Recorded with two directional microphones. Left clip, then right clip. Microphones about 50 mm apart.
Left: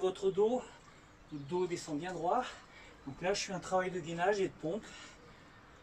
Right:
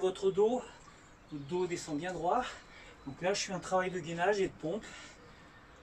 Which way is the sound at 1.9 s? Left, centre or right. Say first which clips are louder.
Right 2 dB; centre.